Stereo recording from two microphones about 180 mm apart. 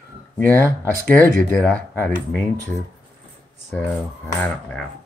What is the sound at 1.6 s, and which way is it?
Speech, 10° left (ahead or behind).